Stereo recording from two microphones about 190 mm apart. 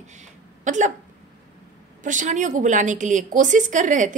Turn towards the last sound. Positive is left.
turn(degrees=-40)  # may be behind; listen again after turning